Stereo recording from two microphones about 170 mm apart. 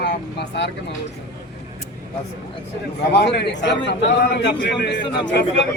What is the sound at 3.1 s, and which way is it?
A man's voice, 80° left.